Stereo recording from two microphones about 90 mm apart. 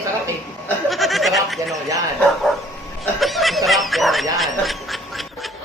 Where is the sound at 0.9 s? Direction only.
Centre (ahead or behind).